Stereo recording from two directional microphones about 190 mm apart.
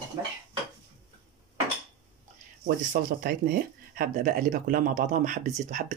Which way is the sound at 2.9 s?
50° right (ahead or behind).